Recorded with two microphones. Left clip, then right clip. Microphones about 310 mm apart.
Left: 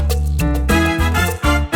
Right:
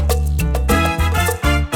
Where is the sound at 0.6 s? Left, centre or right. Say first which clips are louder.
Left 1 dB; right.